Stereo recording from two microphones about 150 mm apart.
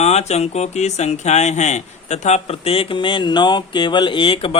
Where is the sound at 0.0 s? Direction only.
45° left (ahead or behind).